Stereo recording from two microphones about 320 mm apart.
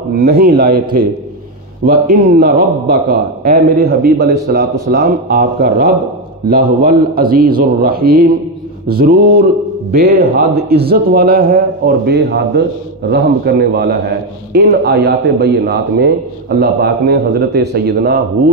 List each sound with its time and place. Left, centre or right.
0.1 s a man's voice: right